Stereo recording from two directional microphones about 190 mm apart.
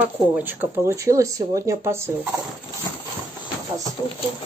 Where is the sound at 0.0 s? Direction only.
10° right (ahead or behind).